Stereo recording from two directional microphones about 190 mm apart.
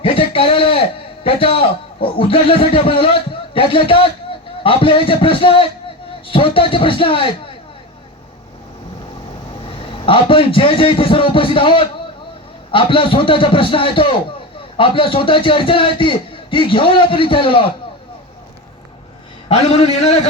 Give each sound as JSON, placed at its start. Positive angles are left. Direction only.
{"t": 0.0, "sound": "a man's voice", "side_deg": 30}
{"t": 9.6, "sound": "a man's voice", "side_deg": 30}
{"t": 19.5, "sound": "a man's voice", "side_deg": 30}